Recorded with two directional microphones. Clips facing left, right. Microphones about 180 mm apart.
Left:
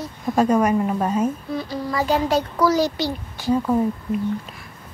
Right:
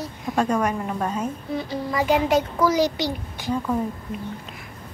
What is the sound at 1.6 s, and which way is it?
A child's voice, 20° right (ahead or behind).